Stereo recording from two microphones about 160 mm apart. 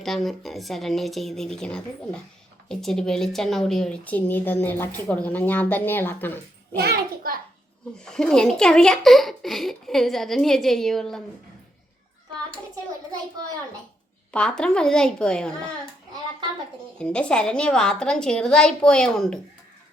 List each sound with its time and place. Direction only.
0.0 s speech: centre (ahead or behind)
6.7 s a child's voice: 75° right (ahead or behind)
7.9 s speech: 5° left (ahead or behind)
14.3 s speech: 5° left (ahead or behind)
17.0 s speech: 5° left (ahead or behind)